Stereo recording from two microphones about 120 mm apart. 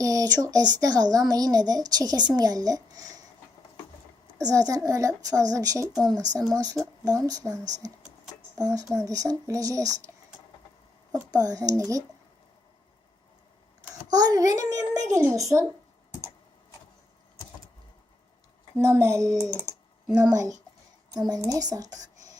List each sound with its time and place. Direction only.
0.0 s a sound: 30° right (ahead or behind)
0.4 s a woman's voice: 35° right (ahead or behind)
4.4 s a woman's voice: 30° right (ahead or behind)
11.1 s a woman's voice: 30° right (ahead or behind)
14.1 s a woman's voice: 35° right (ahead or behind)
18.8 s a woman's voice: 25° right (ahead or behind)